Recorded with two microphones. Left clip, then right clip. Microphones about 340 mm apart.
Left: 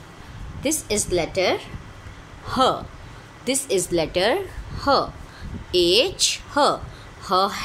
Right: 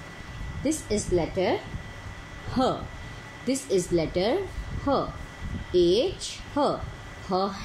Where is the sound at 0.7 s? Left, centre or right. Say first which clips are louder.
Left 4 dB; left.